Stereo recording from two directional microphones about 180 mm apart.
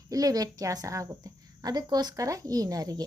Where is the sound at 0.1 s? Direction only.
20° right (ahead or behind).